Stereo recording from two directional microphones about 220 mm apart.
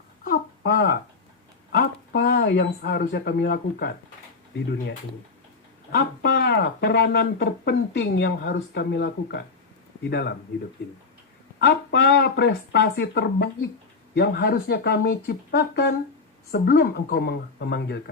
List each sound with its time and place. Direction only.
0.3 s a sound: 45° left (ahead or behind)
1.7 s speech: 45° left (ahead or behind)
5.9 s speech: 50° left (ahead or behind)
11.6 s speech: 50° left (ahead or behind)